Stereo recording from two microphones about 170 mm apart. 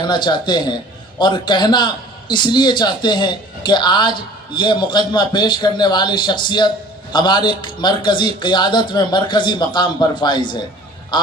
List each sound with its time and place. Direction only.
0.0 s a man's voice: 25° left (ahead or behind)